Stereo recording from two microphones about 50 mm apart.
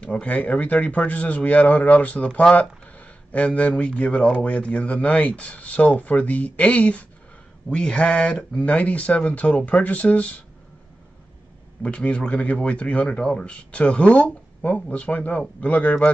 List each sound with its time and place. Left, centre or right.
0.0 s speech: left
11.8 s speech: left